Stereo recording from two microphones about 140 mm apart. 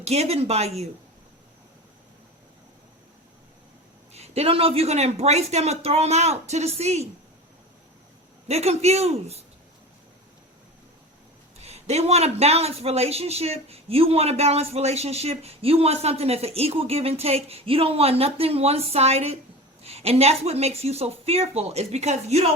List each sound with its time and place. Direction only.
0.0 s a man's voice: 50° right (ahead or behind)
4.1 s a man's voice: 50° right (ahead or behind)
8.4 s a man's voice: 50° right (ahead or behind)
11.5 s a man's voice: 50° right (ahead or behind)